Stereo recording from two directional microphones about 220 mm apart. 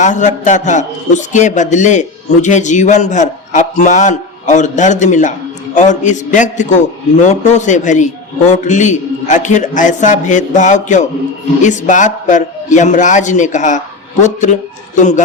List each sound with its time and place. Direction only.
0.0 s a man's voice: 35° left (ahead or behind)